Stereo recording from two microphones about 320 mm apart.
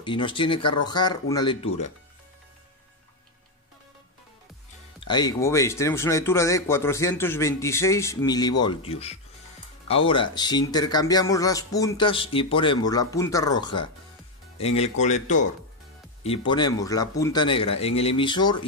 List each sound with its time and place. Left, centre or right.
0.0 s speech: centre
5.0 s speech: centre